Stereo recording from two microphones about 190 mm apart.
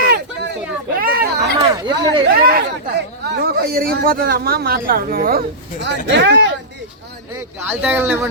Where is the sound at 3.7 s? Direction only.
50° right (ahead or behind).